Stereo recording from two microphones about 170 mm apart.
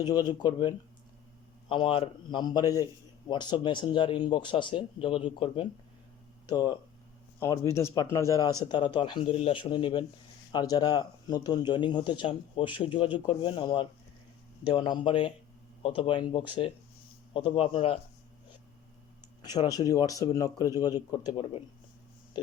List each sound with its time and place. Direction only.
0.0 s a man's voice: 25° left (ahead or behind)
19.4 s a man's voice: 25° left (ahead or behind)